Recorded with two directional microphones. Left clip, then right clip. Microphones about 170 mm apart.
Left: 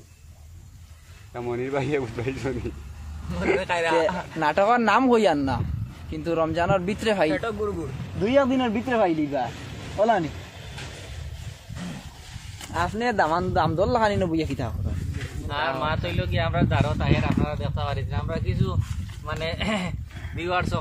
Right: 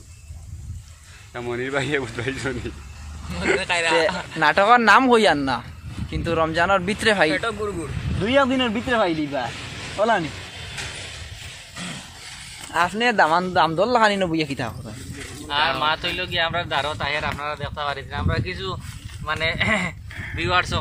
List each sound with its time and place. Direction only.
1.3 s speech: 5° left (ahead or behind)
3.5 s speech: 55° left (ahead or behind)
4.4 s speech: 5° right (ahead or behind)
7.3 s a man's voice: 15° left (ahead or behind)
8.2 s speech: centre (ahead or behind)
12.7 s speech: 15° right (ahead or behind)
15.4 s speech: 5° left (ahead or behind)